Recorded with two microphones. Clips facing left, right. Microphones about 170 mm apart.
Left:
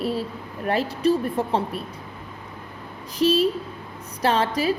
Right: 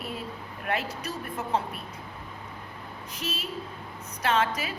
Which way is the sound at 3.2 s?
35° left (ahead or behind).